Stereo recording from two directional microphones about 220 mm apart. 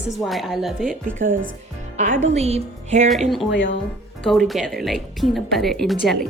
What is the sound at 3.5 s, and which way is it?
Speech, 55° left (ahead or behind).